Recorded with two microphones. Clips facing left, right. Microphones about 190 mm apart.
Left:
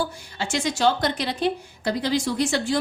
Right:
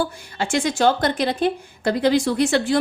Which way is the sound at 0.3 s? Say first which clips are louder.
Right 4 dB; 55° right (ahead or behind).